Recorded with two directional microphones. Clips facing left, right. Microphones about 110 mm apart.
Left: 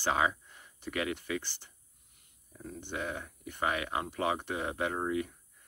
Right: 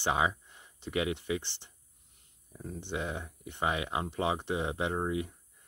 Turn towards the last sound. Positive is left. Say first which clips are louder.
# even
turn(degrees=-20)  # may be behind; listen again after turning